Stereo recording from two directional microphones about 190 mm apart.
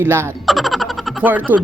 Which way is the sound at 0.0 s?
10° right (ahead or behind).